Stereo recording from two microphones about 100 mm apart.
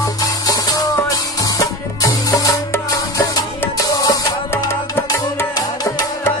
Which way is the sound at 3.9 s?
35° left (ahead or behind).